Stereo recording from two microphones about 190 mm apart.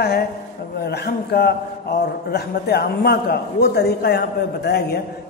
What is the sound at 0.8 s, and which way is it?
A man's voice, 55° left (ahead or behind).